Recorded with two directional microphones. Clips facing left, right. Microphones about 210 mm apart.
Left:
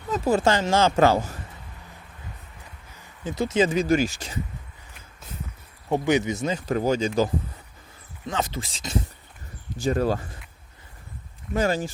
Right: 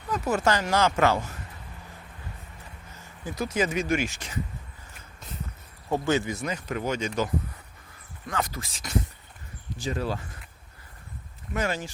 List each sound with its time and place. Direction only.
0.1 s speech: 30° left (ahead or behind)
3.0 s speech: 25° left (ahead or behind)
5.9 s speech: 20° left (ahead or behind); by 7.1 s 35° left (ahead or behind)
8.3 s speech: 25° left (ahead or behind)
9.8 s speech: 45° left (ahead or behind)
11.5 s speech: 35° left (ahead or behind)